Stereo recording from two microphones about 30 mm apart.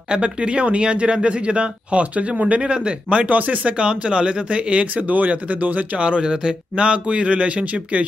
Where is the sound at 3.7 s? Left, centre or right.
Right.